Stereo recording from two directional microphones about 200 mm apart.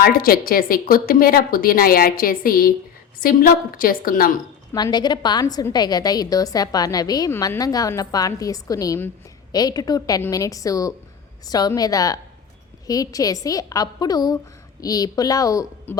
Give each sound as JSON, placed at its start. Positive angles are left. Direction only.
{"t": 0.0, "sound": "a woman's voice", "side_deg": 50}
{"t": 4.7, "sound": "a woman's voice", "side_deg": 20}